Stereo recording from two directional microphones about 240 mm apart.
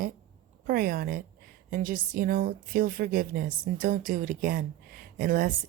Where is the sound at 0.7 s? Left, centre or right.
Right.